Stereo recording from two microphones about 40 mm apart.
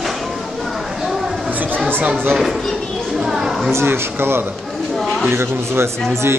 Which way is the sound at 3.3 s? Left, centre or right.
Centre.